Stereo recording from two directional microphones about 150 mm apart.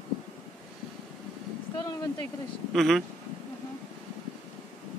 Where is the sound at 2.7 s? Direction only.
Centre (ahead or behind).